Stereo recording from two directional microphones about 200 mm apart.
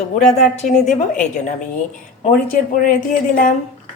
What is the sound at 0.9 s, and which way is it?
Speech, 35° left (ahead or behind).